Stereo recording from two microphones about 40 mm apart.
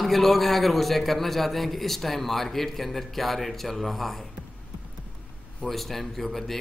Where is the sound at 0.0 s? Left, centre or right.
Centre.